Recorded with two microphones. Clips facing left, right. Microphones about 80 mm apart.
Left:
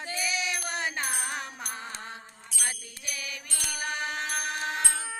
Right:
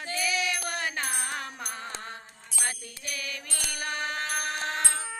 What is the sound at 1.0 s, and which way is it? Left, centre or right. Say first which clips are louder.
Music: even; centre.